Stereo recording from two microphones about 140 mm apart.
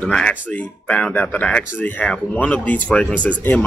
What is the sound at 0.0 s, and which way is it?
Speech, 10° left (ahead or behind).